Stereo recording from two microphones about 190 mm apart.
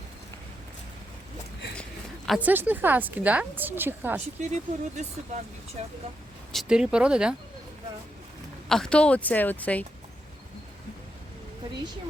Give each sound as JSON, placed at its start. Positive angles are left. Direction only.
{"t": 1.7, "sound": "a sound", "side_deg": 5}
{"t": 2.4, "sound": "a woman's voice", "side_deg": -10}
{"t": 4.4, "sound": "speech", "side_deg": -35}
{"t": 6.5, "sound": "speech", "side_deg": 0}
{"t": 8.7, "sound": "speech", "side_deg": 5}